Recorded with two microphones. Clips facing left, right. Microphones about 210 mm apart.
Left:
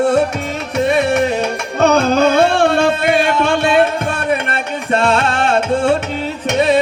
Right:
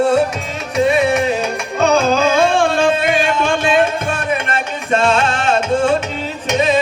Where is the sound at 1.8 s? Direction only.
60° left (ahead or behind).